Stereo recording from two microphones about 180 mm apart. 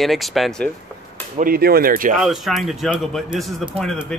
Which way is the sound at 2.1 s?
Centre (ahead or behind).